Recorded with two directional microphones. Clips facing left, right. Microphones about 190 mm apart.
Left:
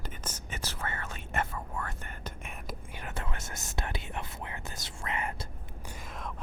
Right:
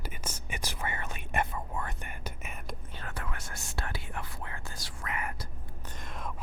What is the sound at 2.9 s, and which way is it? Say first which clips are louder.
Whispering: left 2 dB; 15° left (ahead or behind).